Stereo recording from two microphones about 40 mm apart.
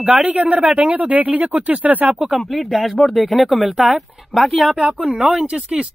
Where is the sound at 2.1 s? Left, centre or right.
Centre.